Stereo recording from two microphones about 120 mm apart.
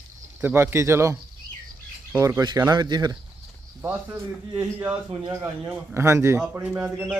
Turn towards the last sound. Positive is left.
turn(degrees=-10)  # may be behind; listen again after turning